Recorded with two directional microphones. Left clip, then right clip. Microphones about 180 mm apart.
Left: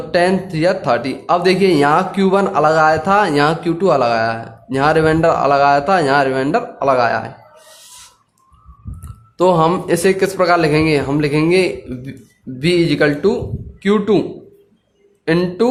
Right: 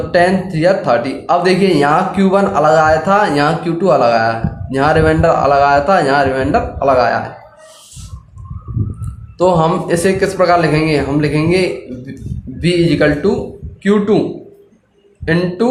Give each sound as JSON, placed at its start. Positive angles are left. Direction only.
{"t": 0.1, "sound": "speech", "side_deg": 40}
{"t": 9.4, "sound": "speech", "side_deg": 40}
{"t": 15.2, "sound": "speech", "side_deg": 45}